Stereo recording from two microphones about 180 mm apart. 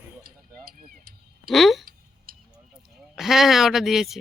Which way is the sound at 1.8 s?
55° right (ahead or behind).